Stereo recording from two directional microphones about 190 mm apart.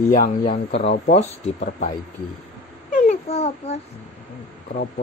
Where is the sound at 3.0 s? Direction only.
35° left (ahead or behind).